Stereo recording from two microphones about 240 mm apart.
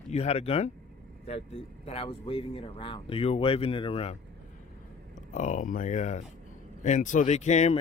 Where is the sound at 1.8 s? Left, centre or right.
Left.